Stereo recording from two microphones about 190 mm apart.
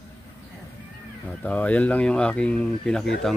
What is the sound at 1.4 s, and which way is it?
Speech, 5° left (ahead or behind).